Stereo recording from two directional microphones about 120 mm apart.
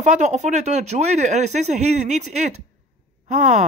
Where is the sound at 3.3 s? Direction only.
85° right.